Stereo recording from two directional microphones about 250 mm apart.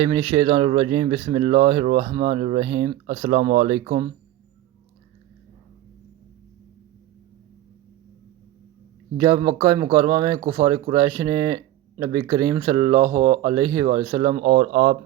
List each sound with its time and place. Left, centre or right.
0.0 s speech: centre
9.1 s speech: centre